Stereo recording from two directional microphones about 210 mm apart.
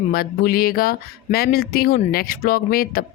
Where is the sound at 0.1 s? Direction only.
45° left (ahead or behind).